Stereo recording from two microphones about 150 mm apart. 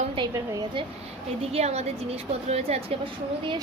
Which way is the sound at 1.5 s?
45° right (ahead or behind).